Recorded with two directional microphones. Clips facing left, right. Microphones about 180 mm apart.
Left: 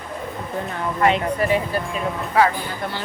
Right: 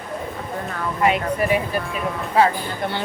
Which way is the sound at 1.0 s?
15° right (ahead or behind).